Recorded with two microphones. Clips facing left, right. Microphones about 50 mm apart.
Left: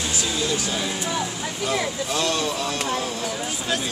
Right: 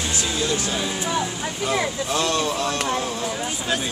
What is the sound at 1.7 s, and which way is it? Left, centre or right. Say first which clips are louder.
Speech: right 2 dB; right.